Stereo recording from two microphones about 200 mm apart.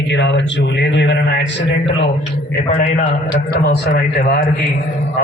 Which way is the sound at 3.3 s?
50° left (ahead or behind).